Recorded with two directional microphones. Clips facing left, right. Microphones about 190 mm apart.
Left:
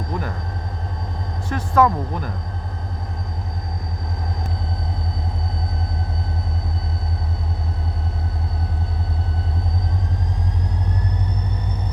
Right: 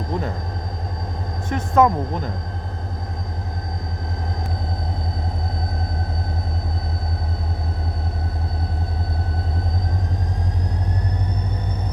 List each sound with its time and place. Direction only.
0.1 s vehicle: 25° right (ahead or behind)
1.5 s speech: 25° right (ahead or behind)